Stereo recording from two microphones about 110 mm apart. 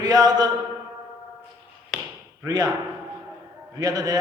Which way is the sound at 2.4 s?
35° right (ahead or behind).